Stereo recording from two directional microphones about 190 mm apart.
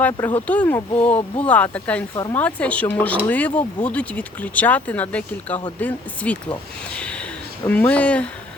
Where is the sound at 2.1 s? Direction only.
20° left (ahead or behind).